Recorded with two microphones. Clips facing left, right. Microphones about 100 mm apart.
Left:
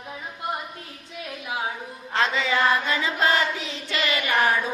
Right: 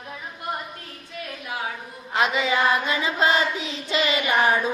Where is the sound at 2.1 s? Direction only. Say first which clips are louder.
Right 1 dB; 15° right (ahead or behind).